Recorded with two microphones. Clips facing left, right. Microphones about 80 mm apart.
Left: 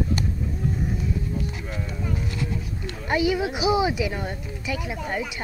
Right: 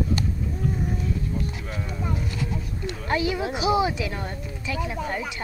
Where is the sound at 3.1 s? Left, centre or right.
Centre.